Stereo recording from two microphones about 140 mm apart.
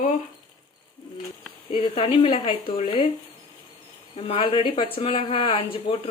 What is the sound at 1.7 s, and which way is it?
Speech, 40° left (ahead or behind).